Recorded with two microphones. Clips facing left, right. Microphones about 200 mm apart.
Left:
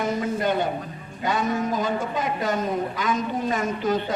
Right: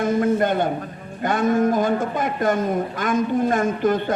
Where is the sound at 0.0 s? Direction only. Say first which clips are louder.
Right 5 dB; 50° right (ahead or behind).